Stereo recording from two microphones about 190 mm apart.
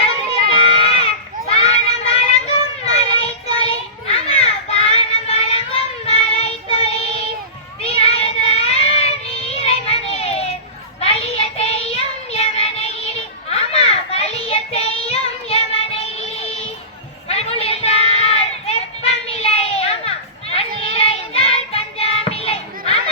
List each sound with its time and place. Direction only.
0.5 s a sound: 30° left (ahead or behind)
3.2 s child singing: 30° left (ahead or behind)
17.2 s children playing: 30° left (ahead or behind)